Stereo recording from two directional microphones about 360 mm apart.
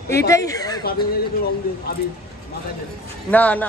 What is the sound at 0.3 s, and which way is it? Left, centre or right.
Speech, centre.